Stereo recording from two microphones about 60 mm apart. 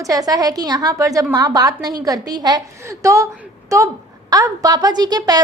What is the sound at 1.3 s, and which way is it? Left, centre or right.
A woman's voice, right.